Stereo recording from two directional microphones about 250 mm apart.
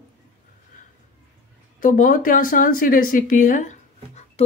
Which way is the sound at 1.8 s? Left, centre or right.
Left.